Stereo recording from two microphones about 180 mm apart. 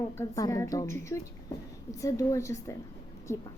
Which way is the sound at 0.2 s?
20° left (ahead or behind).